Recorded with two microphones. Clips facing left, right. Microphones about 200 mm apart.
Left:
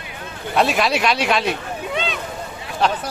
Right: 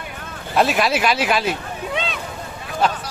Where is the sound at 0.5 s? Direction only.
Centre (ahead or behind).